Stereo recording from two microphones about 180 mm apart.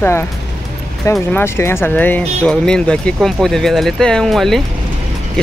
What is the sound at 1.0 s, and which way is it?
Speech, 15° left (ahead or behind).